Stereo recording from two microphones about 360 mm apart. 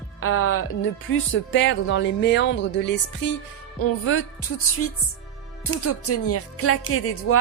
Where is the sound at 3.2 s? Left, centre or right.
Left.